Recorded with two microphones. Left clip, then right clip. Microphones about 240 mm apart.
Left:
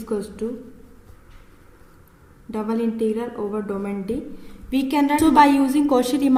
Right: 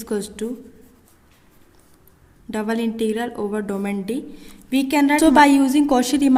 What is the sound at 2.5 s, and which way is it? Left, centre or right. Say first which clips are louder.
A woman's voice: right 1 dB; right.